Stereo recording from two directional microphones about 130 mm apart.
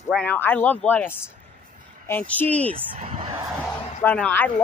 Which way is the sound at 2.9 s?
55° right (ahead or behind).